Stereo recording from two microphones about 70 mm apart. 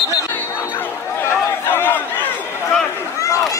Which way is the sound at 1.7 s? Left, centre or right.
Left.